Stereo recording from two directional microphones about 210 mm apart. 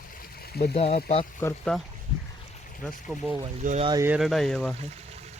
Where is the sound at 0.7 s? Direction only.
30° left (ahead or behind).